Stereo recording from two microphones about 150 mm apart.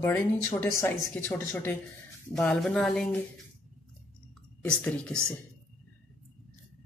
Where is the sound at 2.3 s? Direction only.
5° left (ahead or behind).